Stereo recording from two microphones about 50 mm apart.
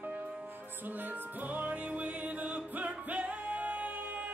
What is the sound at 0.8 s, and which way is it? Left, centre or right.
Music, right.